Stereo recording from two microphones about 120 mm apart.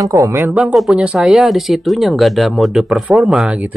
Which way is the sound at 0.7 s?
Centre (ahead or behind).